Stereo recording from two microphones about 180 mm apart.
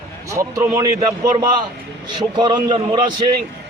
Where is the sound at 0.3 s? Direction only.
15° right (ahead or behind).